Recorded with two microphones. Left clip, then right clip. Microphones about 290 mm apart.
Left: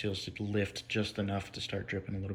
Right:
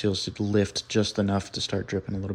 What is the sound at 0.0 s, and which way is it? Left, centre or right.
Speech, centre.